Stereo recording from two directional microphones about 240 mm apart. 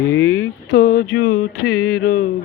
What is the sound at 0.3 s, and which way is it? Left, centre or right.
Speech, left.